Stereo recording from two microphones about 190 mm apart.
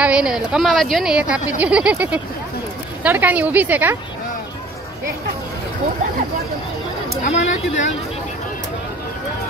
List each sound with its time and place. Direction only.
0.0 s a woman's voice: 5° right (ahead or behind)
7.2 s speech: 40° left (ahead or behind)